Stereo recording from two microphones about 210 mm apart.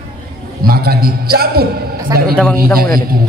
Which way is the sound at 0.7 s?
45° right (ahead or behind).